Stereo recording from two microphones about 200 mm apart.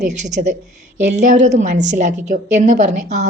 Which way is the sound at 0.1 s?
35° right (ahead or behind).